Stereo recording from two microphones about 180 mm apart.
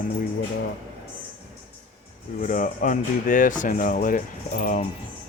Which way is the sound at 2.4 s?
45° left (ahead or behind).